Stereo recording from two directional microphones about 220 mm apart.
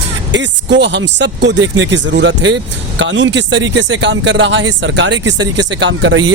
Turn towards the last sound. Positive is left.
turn(degrees=-55)  # may be behind; listen again after turning